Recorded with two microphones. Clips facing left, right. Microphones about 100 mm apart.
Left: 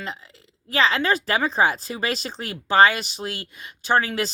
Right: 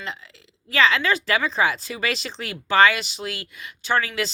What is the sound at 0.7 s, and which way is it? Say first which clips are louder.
Speech: even; 35° left (ahead or behind).